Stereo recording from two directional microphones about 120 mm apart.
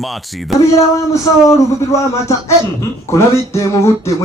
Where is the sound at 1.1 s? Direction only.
25° left (ahead or behind).